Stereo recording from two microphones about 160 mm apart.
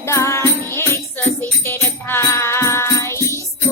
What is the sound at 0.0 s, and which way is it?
Music, 15° left (ahead or behind).